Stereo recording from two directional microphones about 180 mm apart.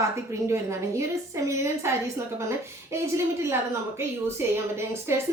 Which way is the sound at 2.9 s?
15° right (ahead or behind).